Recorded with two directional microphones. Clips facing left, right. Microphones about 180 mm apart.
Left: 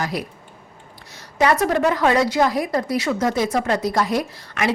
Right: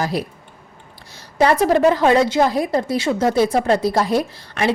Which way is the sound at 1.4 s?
30° right (ahead or behind).